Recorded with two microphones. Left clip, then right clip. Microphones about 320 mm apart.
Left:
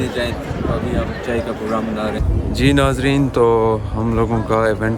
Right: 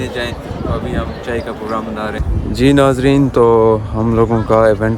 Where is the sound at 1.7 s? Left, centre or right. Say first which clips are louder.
Right 2 dB; centre.